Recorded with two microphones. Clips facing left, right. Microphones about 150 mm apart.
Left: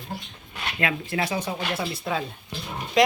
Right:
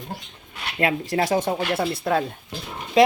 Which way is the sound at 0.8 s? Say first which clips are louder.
Right 5 dB; 35° right (ahead or behind).